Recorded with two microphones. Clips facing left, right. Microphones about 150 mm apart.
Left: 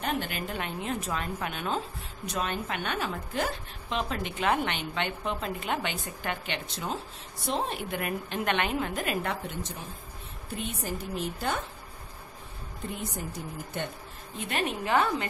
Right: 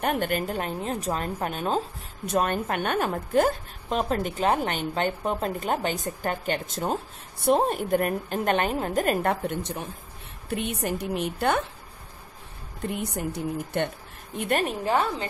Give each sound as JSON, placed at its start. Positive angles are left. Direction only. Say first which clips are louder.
{"t": 0.0, "sound": "a woman's voice", "louder": "right 6 dB", "side_deg": -50}
{"t": 2.2, "sound": "a woman's voice", "louder": "right 7 dB", "side_deg": -50}
{"t": 12.9, "sound": "a woman's voice", "louder": "right 6 dB", "side_deg": -65}
{"t": 14.6, "sound": "a woman's voice", "louder": "left 2 dB", "side_deg": -35}